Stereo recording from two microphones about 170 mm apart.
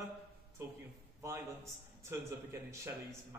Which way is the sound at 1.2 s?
15° right (ahead or behind).